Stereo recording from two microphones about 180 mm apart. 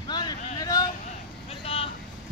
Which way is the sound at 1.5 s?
30° left (ahead or behind).